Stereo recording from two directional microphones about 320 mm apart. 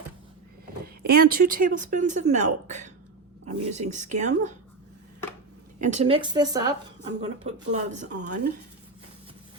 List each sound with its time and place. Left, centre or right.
1.0 s a woman's voice: right
5.8 s a woman's voice: right